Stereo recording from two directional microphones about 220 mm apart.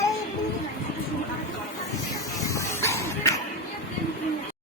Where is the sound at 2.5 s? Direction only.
15° left (ahead or behind).